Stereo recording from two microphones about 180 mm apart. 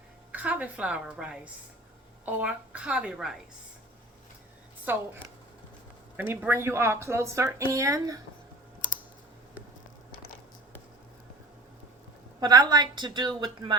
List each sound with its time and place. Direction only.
0.3 s a woman's voice: 10° right (ahead or behind)
6.1 s speech: 10° right (ahead or behind)
12.4 s a woman's voice: 20° right (ahead or behind)